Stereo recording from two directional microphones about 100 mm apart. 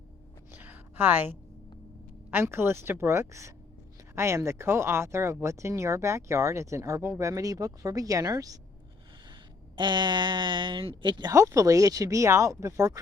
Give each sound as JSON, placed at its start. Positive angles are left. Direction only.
{"t": 0.5, "sound": "a sound", "side_deg": -20}
{"t": 2.3, "sound": "speech", "side_deg": -25}
{"t": 9.7, "sound": "speech", "side_deg": -50}
{"t": 11.3, "sound": "speech", "side_deg": -30}